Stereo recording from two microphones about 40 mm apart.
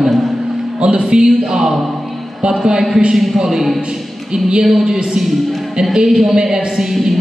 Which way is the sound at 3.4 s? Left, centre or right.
Centre.